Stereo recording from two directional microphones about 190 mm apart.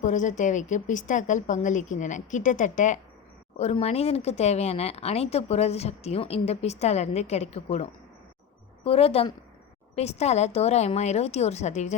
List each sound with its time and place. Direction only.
0.0 s speech: 40° left (ahead or behind)